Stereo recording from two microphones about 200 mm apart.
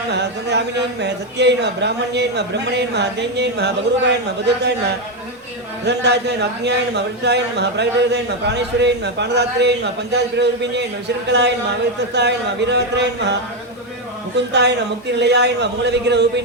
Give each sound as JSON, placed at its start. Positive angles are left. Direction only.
{"t": 0.1, "sound": "speech", "side_deg": -55}
{"t": 5.8, "sound": "speech", "side_deg": -55}
{"t": 14.5, "sound": "speech", "side_deg": -55}